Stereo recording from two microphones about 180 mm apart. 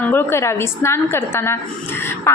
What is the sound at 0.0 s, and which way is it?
A woman's voice, 15° left (ahead or behind).